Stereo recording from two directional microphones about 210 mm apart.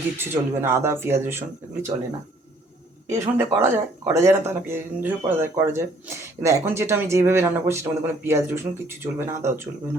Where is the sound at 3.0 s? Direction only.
35° right (ahead or behind).